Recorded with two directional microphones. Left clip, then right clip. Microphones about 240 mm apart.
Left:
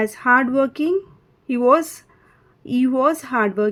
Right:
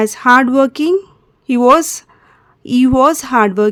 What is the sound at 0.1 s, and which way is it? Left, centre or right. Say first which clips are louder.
A woman's voice: right 7 dB; right.